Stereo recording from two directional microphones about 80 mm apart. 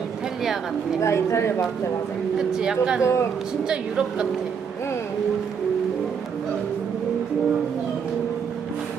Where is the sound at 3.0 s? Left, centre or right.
Left.